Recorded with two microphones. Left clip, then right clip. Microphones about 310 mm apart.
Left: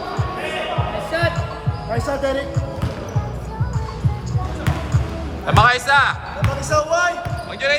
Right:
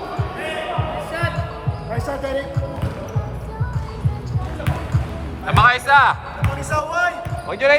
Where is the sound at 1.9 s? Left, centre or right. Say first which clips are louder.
Left 3 dB; left.